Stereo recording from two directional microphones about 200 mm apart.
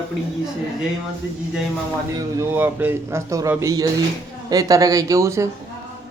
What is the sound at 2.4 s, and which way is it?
A man's voice, 10° right (ahead or behind).